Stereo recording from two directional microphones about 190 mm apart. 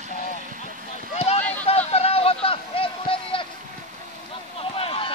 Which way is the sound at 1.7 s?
35° left (ahead or behind).